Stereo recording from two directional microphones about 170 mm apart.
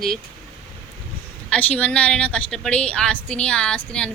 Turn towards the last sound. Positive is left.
turn(degrees=5)  # may be behind; listen again after turning